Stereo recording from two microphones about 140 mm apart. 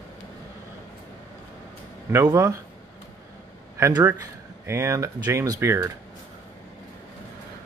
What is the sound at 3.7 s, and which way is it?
Speech, 20° right (ahead or behind).